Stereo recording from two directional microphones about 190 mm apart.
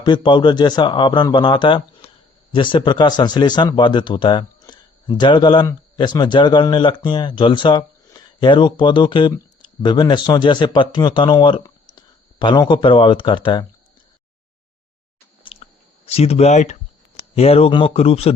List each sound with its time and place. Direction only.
0.0 s speech: 25° left (ahead or behind)
15.4 s chewing: 30° left (ahead or behind)
17.3 s speech: 30° left (ahead or behind)